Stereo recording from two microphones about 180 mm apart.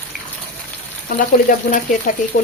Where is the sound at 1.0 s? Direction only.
50° left (ahead or behind).